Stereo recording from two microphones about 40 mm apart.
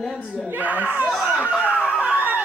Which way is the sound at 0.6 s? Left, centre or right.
Right.